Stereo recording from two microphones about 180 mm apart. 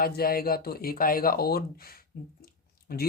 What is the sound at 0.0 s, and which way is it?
Speech, 55° left (ahead or behind).